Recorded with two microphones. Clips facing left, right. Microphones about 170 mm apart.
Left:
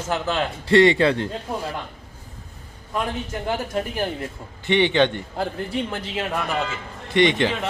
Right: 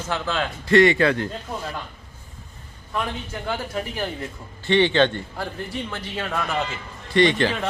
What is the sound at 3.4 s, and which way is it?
A man's voice, 20° left (ahead or behind).